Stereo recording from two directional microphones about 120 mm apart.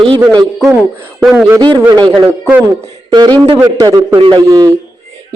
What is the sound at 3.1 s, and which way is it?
Speech, 35° right (ahead or behind).